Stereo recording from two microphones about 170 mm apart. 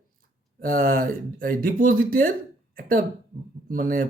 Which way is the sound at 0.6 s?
55° right (ahead or behind).